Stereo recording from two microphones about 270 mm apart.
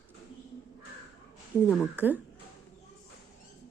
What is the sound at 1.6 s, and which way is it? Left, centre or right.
Speech, centre.